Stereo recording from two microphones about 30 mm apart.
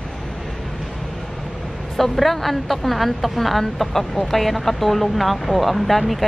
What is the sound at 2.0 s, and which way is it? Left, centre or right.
A woman's voice, centre.